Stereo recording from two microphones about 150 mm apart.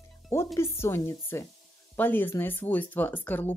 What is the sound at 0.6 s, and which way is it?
Speech, 15° left (ahead or behind).